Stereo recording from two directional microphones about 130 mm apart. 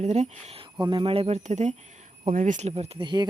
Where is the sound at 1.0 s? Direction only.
45° right (ahead or behind); by 1.8 s 60° right (ahead or behind).